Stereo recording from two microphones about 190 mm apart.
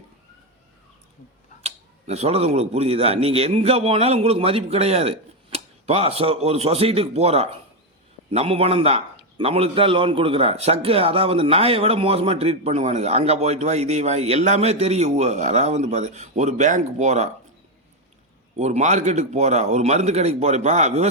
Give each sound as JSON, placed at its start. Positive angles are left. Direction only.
{"t": 1.6, "sound": "a man's voice", "side_deg": -35}
{"t": 18.6, "sound": "a man's voice", "side_deg": -35}